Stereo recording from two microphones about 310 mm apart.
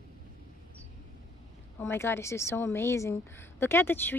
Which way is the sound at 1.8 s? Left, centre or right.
Centre.